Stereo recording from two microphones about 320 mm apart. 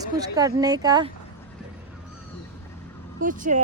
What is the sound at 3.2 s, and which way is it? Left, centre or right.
Speech, right.